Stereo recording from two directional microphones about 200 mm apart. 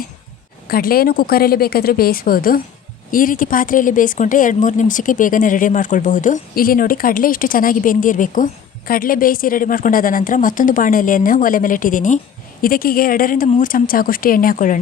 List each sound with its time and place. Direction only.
0.7 s a woman's voice: 50° left (ahead or behind)